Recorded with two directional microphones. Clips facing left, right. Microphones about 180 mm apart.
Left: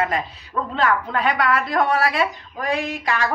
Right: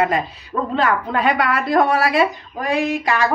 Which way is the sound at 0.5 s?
25° right (ahead or behind).